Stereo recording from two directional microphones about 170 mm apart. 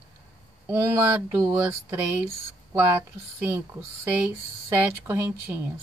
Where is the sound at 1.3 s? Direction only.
15° right (ahead or behind).